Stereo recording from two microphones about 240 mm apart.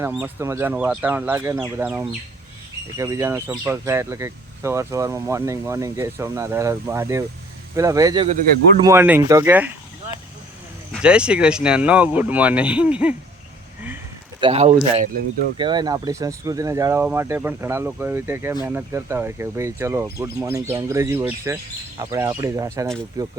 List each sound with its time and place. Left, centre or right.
0.0 s speech: centre
10.9 s speech: centre
14.4 s speech: right
15.6 s speech: centre